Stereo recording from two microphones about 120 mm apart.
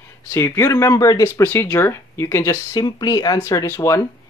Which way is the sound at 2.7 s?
35° left (ahead or behind).